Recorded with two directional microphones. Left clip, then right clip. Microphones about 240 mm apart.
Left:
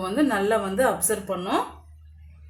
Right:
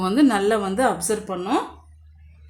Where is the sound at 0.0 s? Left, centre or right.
Right.